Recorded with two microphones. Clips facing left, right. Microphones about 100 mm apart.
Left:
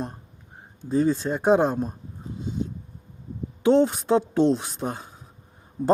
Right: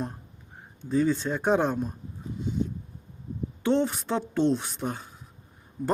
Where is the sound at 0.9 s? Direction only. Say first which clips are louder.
Left 2 dB; 25° left (ahead or behind).